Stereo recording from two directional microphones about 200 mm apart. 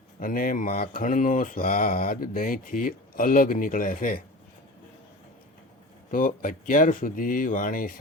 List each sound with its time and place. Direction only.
0.2 s mantra: 45° left (ahead or behind)
6.1 s mantra: 40° left (ahead or behind)